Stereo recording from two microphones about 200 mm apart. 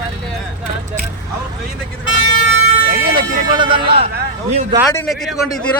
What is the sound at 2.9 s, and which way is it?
Speech, 25° right (ahead or behind).